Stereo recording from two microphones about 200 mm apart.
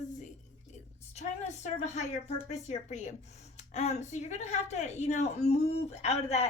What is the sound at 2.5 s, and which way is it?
Speech, 35° left (ahead or behind).